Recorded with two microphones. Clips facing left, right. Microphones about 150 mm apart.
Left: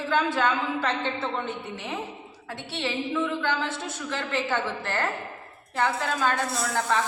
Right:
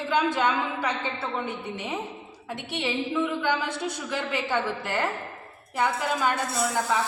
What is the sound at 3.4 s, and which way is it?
A man's voice, 15° right (ahead or behind).